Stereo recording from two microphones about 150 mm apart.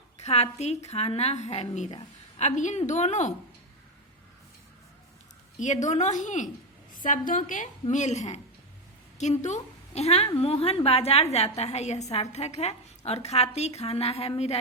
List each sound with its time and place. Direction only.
0.2 s a woman's voice: 45° left (ahead or behind)
5.5 s a woman's voice: 55° left (ahead or behind)